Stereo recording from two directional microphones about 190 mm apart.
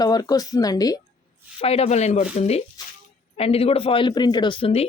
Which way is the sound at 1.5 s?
30° left (ahead or behind).